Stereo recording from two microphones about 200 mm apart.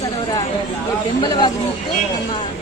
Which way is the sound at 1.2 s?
20° left (ahead or behind).